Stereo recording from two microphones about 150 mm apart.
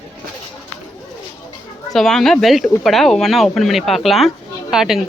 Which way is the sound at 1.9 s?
5° left (ahead or behind).